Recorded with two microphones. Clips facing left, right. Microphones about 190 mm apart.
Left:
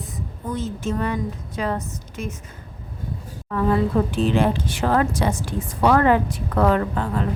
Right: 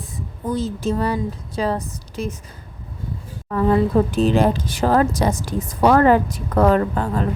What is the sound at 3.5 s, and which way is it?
Speech, 35° right (ahead or behind).